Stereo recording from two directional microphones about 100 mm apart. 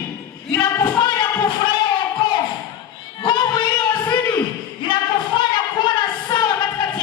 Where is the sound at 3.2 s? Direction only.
50° left (ahead or behind).